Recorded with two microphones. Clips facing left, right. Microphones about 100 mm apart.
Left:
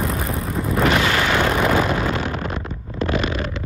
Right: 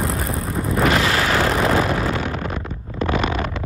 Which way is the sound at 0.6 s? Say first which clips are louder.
Even; centre (ahead or behind).